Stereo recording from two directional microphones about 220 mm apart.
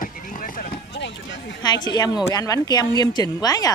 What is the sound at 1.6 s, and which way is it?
Speech, 20° left (ahead or behind).